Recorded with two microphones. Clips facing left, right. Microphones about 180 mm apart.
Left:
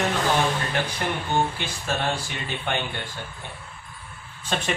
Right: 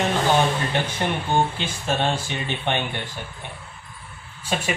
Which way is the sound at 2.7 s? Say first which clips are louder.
Right 3 dB; 25° right (ahead or behind).